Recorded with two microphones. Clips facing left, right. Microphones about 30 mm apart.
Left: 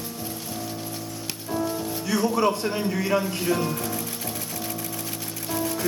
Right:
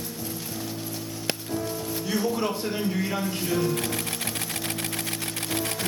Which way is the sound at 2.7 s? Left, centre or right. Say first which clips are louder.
Left 4 dB; centre.